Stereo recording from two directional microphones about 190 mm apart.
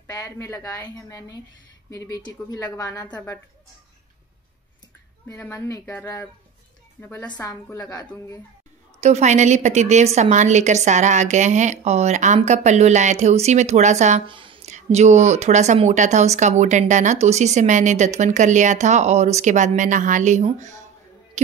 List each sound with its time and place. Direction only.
0.0 s a woman's voice: 15° left (ahead or behind)
5.3 s a woman's voice: 15° left (ahead or behind)
9.0 s speech: 35° right (ahead or behind)
14.2 s speech: 25° right (ahead or behind)